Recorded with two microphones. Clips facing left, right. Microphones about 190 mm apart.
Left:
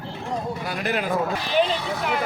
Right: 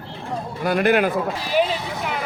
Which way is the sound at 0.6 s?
60° right (ahead or behind).